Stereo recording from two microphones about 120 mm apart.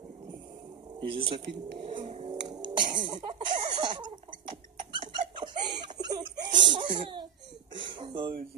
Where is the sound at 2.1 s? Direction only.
55° right (ahead or behind).